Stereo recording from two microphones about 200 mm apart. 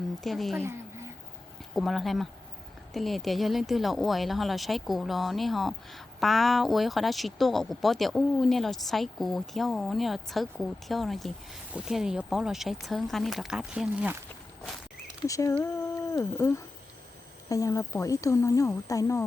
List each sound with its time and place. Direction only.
0.2 s speech: centre (ahead or behind)
0.6 s a sound: 15° right (ahead or behind)
1.7 s speech: centre (ahead or behind)
15.2 s speech: 15° left (ahead or behind)